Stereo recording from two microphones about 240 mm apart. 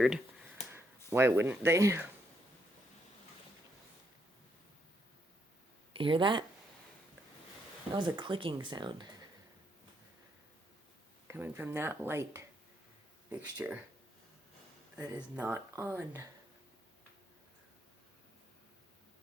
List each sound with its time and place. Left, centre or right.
0.7 s speech: centre
5.9 s speech: right
7.9 s speech: centre
11.3 s speech: centre
14.9 s speech: centre